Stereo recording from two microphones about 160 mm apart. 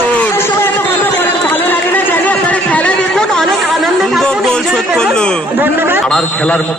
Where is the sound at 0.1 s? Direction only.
10° left (ahead or behind).